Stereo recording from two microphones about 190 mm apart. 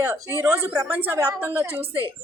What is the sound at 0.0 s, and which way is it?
A woman's voice, 10° right (ahead or behind).